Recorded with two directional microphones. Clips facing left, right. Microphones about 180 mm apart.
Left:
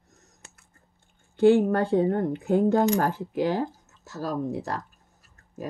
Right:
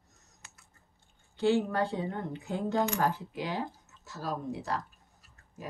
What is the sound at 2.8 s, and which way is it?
Speech, 40° left (ahead or behind).